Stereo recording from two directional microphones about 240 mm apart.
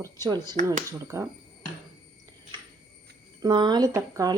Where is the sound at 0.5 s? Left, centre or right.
Right.